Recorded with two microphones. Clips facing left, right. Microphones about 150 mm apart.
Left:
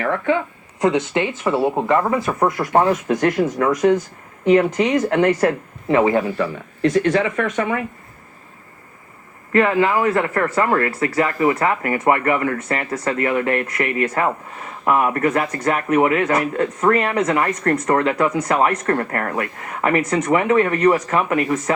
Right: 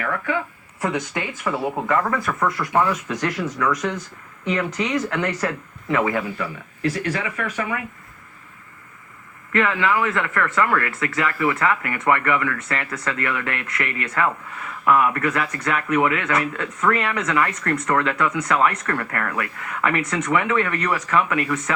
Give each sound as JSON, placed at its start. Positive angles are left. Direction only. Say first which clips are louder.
{"t": 0.0, "sound": "speech", "louder": "left 5 dB", "side_deg": 30}
{"t": 2.4, "sound": "speech", "louder": "left 4 dB", "side_deg": 45}
{"t": 5.9, "sound": "speech", "louder": "left 6 dB", "side_deg": 30}
{"t": 9.5, "sound": "speech", "louder": "left 5 dB", "side_deg": 35}